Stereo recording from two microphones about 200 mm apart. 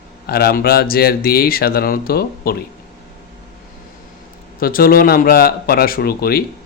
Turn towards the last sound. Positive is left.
turn(degrees=50)  # may be behind; listen again after turning